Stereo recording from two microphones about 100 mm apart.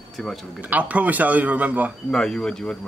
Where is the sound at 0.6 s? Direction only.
15° right (ahead or behind).